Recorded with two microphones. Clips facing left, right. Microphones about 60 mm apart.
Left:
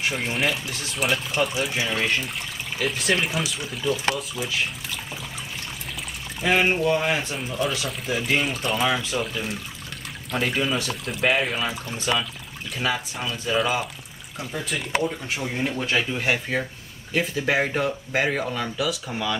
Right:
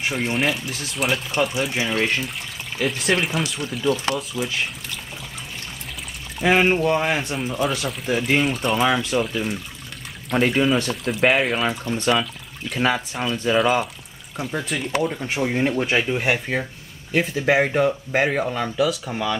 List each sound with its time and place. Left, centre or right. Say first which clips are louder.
0.0 s speech: right 2 dB; centre
6.4 s speech: right 3 dB; centre
12.7 s speech: right 5 dB; centre
15.3 s speech: right 6 dB; right
16.3 s speech: right 2 dB; centre